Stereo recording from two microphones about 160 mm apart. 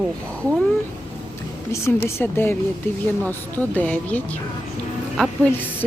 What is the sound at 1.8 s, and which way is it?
Speech, 15° left (ahead or behind).